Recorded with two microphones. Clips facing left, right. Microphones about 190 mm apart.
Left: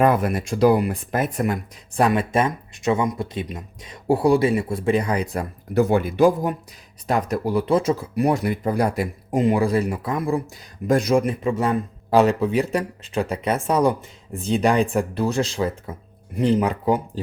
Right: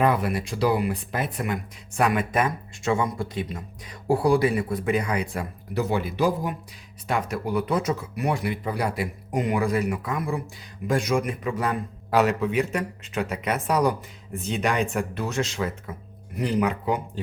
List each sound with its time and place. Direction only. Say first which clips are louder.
0.0 s speech: left 4 dB; 50° left (ahead or behind)
2.0 s a man's voice: left 4 dB; 30° left (ahead or behind); by 9.0 s 45° left (ahead or behind)
9.3 s a man's voice: left 5 dB; 25° left (ahead or behind)